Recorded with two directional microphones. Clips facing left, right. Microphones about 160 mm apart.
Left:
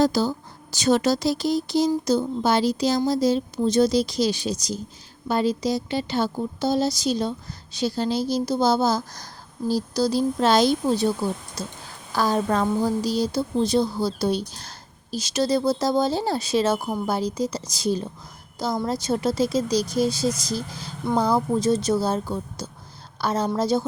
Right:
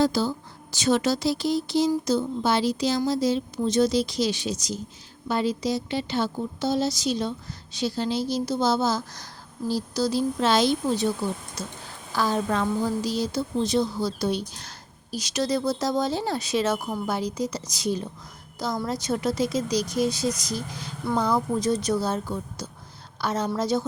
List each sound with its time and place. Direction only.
0.0 s a woman's voice: 40° left (ahead or behind)